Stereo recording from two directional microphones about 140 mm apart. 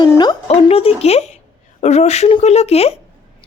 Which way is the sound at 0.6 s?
45° left (ahead or behind).